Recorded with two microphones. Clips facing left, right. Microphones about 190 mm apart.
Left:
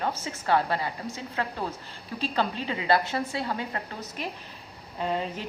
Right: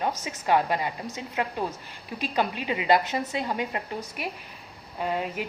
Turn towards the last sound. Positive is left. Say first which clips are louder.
# right 1 dB
turn(degrees=-5)  # may be behind; listen again after turning